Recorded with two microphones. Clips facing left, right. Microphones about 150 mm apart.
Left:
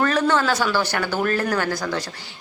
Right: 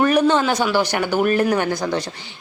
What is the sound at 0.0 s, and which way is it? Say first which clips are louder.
A woman's voice: right 4 dB; 15° right (ahead or behind).